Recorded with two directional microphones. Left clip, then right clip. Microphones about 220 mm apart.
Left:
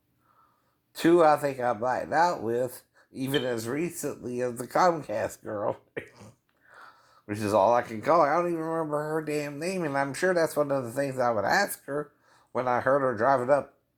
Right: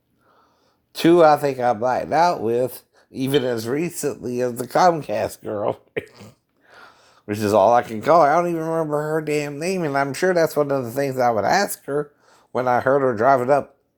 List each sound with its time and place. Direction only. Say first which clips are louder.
0.9 s speech: right 7 dB; 45° right (ahead or behind)